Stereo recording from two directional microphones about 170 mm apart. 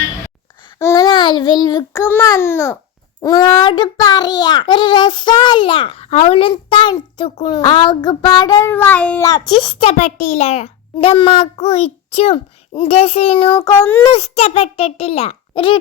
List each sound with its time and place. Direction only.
0.8 s babbling: 15° left (ahead or behind)
1.0 s a child's voice: 30° left (ahead or behind); by 9.2 s 10° left (ahead or behind)
9.2 s a child's voice: 25° left (ahead or behind)
14.1 s a child's voice: 40° left (ahead or behind)